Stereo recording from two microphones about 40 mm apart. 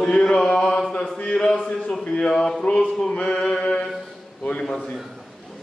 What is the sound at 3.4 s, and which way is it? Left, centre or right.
Music, left.